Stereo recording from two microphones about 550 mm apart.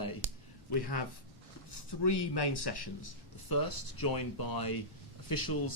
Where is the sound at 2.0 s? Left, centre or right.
Left.